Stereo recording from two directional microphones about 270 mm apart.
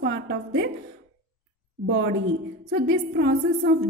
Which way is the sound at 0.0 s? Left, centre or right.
Right.